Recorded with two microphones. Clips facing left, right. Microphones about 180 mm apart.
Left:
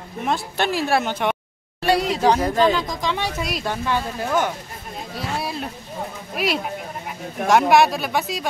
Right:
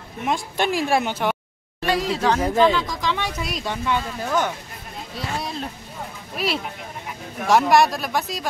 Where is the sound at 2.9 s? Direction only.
15° left (ahead or behind).